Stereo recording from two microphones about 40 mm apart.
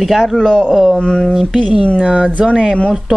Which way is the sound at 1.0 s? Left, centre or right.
Left.